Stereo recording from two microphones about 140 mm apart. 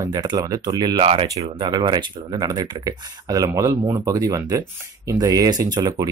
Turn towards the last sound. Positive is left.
turn(degrees=-25)  # may be behind; listen again after turning